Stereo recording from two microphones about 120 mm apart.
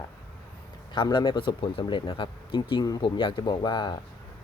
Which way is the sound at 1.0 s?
40° left (ahead or behind).